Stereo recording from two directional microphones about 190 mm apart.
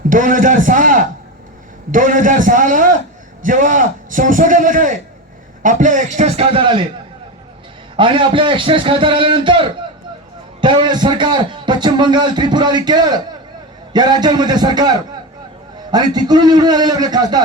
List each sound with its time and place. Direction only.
0.1 s a man's voice: 45° right (ahead or behind); by 6.8 s 25° right (ahead or behind)
7.9 s a man's voice: 25° right (ahead or behind)